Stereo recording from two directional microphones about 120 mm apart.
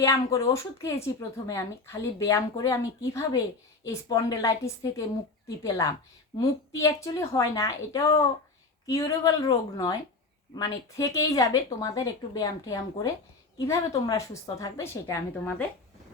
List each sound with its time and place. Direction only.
0.0 s a woman's voice: 25° left (ahead or behind)